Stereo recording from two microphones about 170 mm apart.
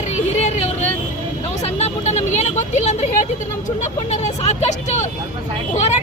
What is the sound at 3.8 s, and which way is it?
Speech, 40° left (ahead or behind).